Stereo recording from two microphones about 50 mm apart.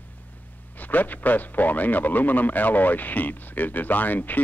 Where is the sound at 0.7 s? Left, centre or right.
Left.